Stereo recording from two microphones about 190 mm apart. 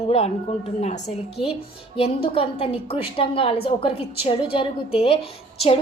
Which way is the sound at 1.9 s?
30° left (ahead or behind).